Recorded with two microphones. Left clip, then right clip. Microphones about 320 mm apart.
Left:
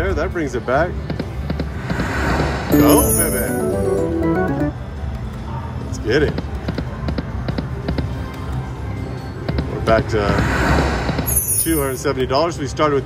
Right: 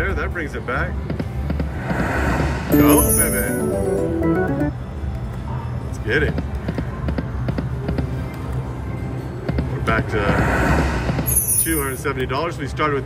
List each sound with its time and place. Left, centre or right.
0.0 s music: centre
6.0 s basketball bounce: centre
9.5 s music: centre